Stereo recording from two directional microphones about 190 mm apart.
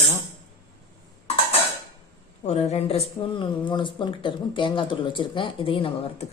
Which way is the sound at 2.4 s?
35° left (ahead or behind).